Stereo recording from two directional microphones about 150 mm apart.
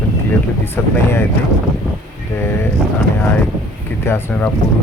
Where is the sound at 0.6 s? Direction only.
15° left (ahead or behind).